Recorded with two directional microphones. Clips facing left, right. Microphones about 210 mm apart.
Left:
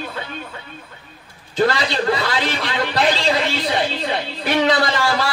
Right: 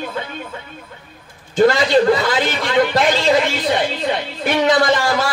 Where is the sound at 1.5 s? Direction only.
45° right (ahead or behind).